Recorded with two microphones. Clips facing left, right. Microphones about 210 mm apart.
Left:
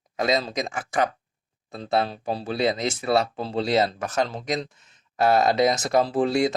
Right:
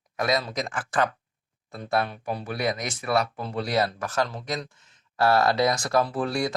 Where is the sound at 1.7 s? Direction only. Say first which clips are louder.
Left 2 dB; 25° left (ahead or behind).